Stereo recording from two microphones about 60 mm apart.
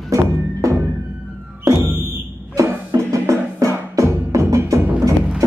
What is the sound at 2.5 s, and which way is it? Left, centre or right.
Music, right.